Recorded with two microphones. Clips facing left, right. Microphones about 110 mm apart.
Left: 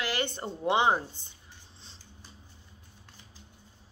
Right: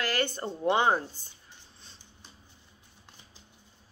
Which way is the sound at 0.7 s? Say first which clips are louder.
Even; 20° left (ahead or behind).